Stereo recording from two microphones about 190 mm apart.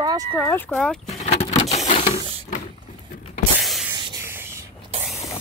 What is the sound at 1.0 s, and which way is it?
Vehicle, 35° left (ahead or behind).